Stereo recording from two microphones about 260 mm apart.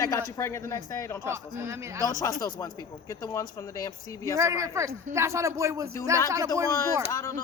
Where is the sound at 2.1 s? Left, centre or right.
Centre.